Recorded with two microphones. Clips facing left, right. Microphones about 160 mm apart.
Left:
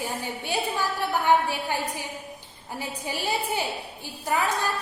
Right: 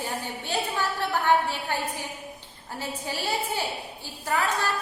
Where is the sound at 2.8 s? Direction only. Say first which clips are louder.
Even; 15° left (ahead or behind).